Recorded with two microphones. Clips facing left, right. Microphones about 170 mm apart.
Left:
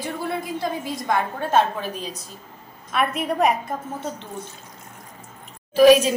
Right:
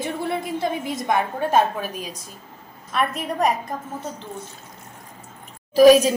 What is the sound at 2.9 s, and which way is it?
Speech, centre (ahead or behind).